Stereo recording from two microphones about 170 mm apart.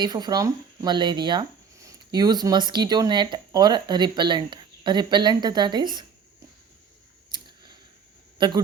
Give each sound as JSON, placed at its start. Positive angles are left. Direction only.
{"t": 0.0, "sound": "speech", "side_deg": -25}
{"t": 7.3, "sound": "a sound", "side_deg": -25}
{"t": 8.4, "sound": "a man's voice", "side_deg": -25}